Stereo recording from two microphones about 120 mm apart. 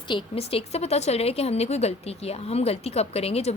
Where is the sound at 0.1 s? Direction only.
50° left (ahead or behind).